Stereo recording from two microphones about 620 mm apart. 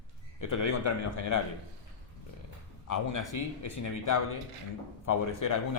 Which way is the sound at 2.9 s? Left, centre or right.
Left.